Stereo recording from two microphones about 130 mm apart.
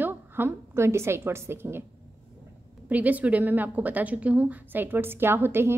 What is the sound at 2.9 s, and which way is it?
A woman's voice, 10° right (ahead or behind).